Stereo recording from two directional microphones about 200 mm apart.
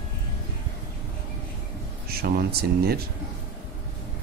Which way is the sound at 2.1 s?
50° right (ahead or behind).